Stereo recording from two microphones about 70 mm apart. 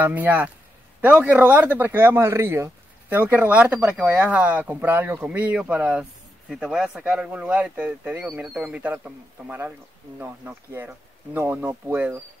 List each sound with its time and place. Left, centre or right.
0.0 s speech: right